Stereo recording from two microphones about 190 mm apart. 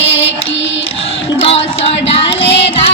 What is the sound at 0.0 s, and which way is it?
Music, 70° left (ahead or behind).